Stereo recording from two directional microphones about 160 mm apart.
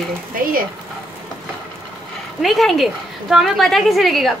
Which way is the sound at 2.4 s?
Centre (ahead or behind).